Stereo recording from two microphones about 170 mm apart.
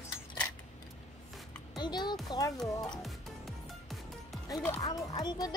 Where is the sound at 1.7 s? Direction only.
25° left (ahead or behind).